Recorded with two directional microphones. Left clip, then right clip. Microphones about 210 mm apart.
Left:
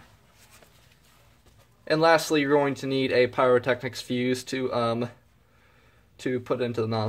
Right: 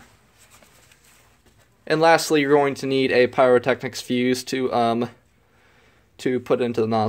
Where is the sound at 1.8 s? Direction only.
35° right (ahead or behind).